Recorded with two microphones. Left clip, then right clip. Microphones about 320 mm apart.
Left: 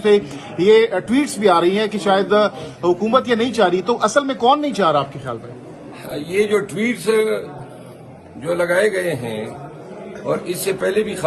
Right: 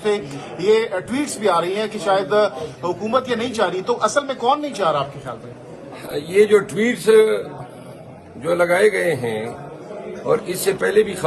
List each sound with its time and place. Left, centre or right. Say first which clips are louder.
0.0 s a man's voice: left 6 dB; left
6.1 s a man's voice: right 4 dB; centre
8.4 s a man's voice: right 1 dB; centre